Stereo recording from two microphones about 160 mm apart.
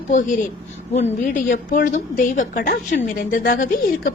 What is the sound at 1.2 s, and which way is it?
A woman's voice, 65° left (ahead or behind).